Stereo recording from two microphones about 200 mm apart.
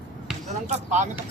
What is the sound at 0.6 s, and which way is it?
Speech, 35° right (ahead or behind).